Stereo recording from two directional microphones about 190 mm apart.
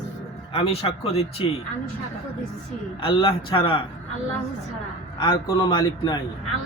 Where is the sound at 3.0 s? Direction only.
25° left (ahead or behind).